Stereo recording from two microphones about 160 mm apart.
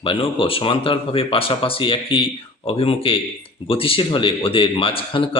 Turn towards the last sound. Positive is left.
turn(degrees=35)  # may be behind; listen again after turning